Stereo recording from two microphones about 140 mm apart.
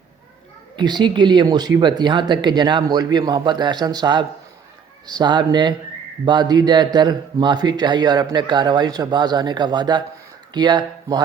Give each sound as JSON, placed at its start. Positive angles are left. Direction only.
{"t": 0.8, "sound": "speech", "side_deg": -30}